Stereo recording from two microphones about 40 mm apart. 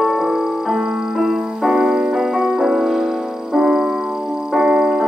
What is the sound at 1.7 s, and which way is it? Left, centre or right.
Music, centre.